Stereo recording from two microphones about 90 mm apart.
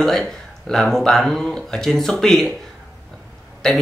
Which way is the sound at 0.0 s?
5° left (ahead or behind).